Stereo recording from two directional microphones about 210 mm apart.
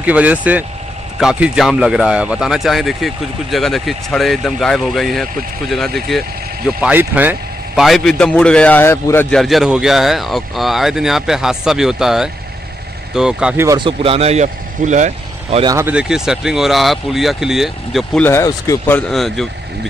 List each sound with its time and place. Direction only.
0.0 s speech: 5° right (ahead or behind)
13.7 s speech: 25° right (ahead or behind)
15.6 s speech: 15° right (ahead or behind)